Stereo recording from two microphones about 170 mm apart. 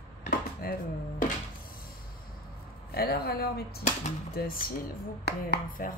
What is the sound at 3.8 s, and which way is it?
Speech, 50° left (ahead or behind).